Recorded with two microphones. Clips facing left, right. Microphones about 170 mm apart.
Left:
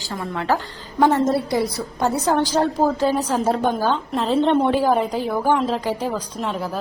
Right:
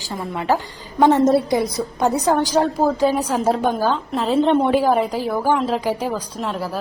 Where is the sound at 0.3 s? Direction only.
15° right (ahead or behind).